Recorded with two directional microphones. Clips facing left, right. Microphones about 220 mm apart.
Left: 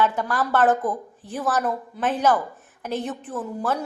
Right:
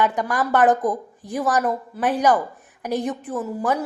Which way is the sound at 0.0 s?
15° right (ahead or behind).